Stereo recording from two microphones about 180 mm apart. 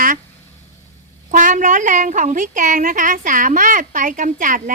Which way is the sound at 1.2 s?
45° right (ahead or behind).